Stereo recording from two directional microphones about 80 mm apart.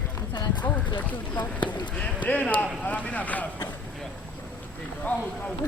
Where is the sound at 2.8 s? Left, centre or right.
Centre.